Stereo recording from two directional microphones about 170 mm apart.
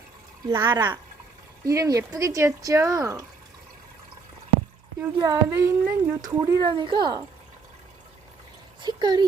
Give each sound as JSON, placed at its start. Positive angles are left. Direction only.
{"t": 0.4, "sound": "speech", "side_deg": -15}
{"t": 4.9, "sound": "speech", "side_deg": -20}
{"t": 6.2, "sound": "speech", "side_deg": -25}
{"t": 8.8, "sound": "speech", "side_deg": -25}